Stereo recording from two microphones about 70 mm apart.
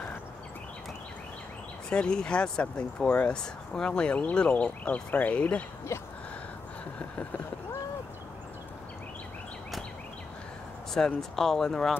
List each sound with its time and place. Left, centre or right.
1.9 s speech: centre
5.9 s a sound: left
11.1 s speech: centre